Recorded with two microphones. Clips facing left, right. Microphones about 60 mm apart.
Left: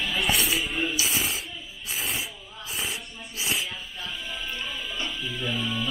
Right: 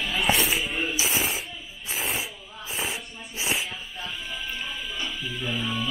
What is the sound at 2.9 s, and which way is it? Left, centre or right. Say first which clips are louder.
Snort: right 1 dB; right.